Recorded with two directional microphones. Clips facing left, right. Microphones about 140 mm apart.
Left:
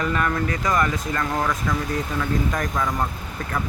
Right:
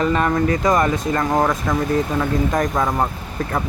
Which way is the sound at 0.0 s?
30° right (ahead or behind).